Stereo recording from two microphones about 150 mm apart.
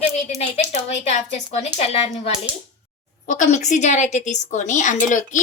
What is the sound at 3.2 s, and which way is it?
A woman's voice, 55° left (ahead or behind).